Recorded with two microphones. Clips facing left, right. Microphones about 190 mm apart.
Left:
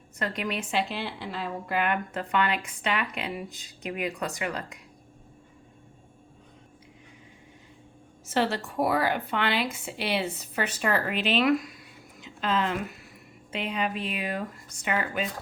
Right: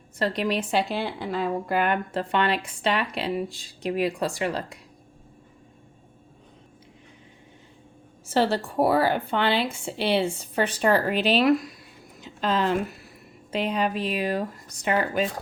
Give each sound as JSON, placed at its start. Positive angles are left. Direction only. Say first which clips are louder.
{"t": 0.2, "sound": "a woman's voice", "louder": "right 6 dB", "side_deg": -35}
{"t": 8.3, "sound": "a woman's voice", "louder": "right 4 dB", "side_deg": -35}